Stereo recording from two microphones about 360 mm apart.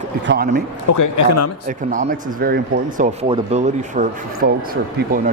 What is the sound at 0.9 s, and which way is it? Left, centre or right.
Speech, left.